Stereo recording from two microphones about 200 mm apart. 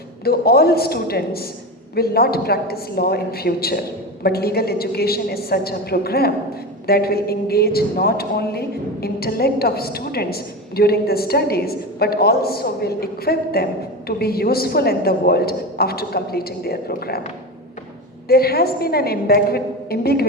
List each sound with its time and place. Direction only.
0.3 s a woman's voice: 50° left (ahead or behind)
18.3 s a woman's voice: 50° left (ahead or behind)